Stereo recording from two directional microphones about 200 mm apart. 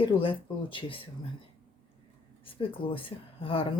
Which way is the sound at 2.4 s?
25° left (ahead or behind).